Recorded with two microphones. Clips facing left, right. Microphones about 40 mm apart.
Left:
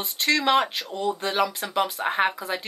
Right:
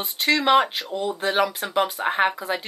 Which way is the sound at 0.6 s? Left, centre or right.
Right.